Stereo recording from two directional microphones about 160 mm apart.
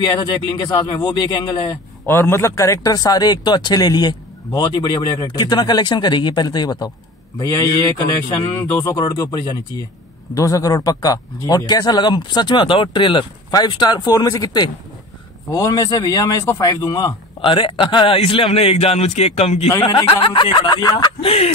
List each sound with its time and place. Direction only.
0.0 s speech: 25° left (ahead or behind)
2.0 s speech: 15° left (ahead or behind)
8.9 s speech: 25° left (ahead or behind); by 19.7 s 40° left (ahead or behind)
19.8 s speech: 30° left (ahead or behind)